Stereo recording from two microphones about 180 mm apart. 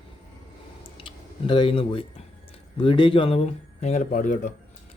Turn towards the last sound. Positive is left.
turn(degrees=45)  # may be behind; listen again after turning